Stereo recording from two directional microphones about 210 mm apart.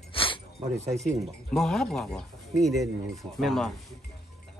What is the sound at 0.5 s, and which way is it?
Speech, 30° right (ahead or behind).